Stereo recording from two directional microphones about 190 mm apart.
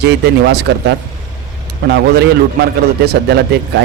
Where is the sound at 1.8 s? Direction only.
55° right (ahead or behind).